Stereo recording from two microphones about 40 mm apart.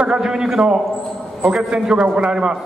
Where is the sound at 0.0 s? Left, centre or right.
Centre.